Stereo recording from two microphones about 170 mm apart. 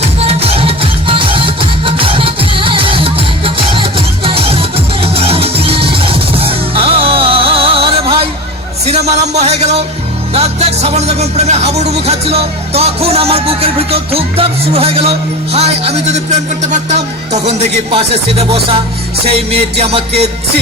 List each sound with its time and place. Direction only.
0.0 s music: 35° right (ahead or behind)
8.9 s a sound: 40° right (ahead or behind)
10.3 s speech: 40° right (ahead or behind)